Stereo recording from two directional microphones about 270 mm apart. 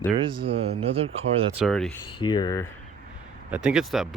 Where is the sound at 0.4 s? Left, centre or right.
Right.